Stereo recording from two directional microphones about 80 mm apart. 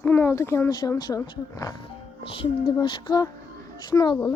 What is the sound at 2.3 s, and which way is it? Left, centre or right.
Speech, left.